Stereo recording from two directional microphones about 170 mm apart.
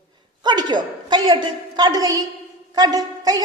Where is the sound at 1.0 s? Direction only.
25° right (ahead or behind).